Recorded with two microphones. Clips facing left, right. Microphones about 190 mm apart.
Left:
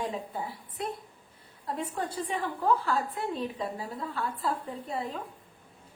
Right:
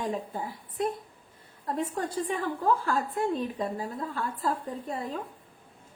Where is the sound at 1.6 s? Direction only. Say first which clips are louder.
Right 3 dB; 45° right (ahead or behind).